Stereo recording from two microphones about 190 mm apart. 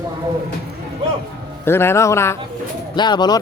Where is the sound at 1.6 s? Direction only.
10° left (ahead or behind).